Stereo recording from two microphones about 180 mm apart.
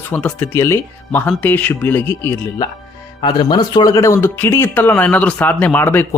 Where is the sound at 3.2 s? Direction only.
25° left (ahead or behind).